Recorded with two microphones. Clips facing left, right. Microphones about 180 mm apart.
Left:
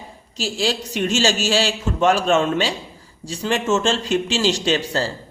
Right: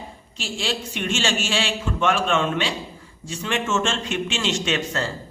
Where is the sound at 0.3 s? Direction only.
40° left (ahead or behind).